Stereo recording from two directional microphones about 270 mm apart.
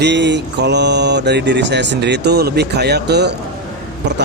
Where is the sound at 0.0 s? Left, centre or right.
Right.